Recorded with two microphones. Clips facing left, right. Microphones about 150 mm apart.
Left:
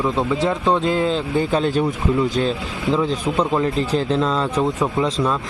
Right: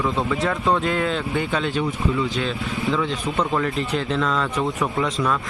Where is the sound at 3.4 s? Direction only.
25° left (ahead or behind).